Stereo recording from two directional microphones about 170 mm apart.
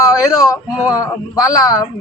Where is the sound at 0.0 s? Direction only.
20° left (ahead or behind).